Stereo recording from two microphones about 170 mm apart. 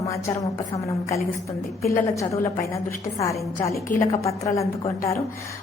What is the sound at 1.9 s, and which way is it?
A woman's voice, 15° left (ahead or behind).